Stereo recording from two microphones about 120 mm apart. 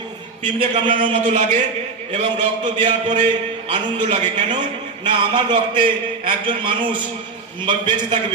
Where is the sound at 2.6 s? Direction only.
40° right (ahead or behind).